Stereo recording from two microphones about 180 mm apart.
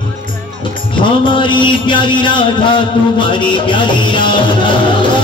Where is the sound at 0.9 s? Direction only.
25° left (ahead or behind).